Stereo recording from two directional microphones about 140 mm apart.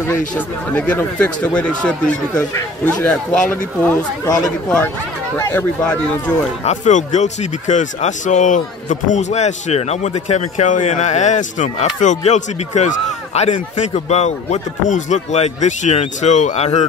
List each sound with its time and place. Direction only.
0.7 s speech: 10° left (ahead or behind)
6.6 s speech: 60° left (ahead or behind)